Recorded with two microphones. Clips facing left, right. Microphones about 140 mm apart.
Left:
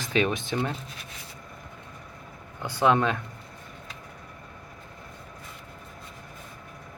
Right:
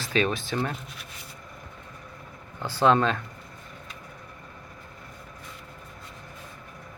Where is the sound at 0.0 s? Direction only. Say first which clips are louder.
Even; 15° left (ahead or behind).